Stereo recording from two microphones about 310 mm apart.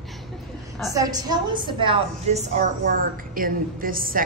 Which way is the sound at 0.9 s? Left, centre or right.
Centre.